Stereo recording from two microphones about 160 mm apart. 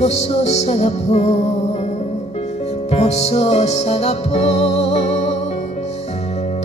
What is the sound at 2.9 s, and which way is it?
Music, 40° left (ahead or behind).